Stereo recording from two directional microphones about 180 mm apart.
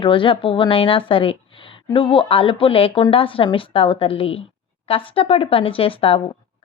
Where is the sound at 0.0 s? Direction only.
30° left (ahead or behind).